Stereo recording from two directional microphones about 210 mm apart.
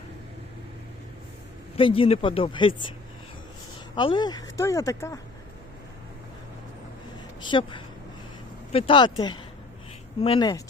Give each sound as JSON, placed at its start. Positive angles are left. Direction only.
{"t": 1.7, "sound": "speech", "side_deg": 25}
{"t": 3.9, "sound": "speech", "side_deg": 20}
{"t": 7.4, "sound": "speech", "side_deg": 25}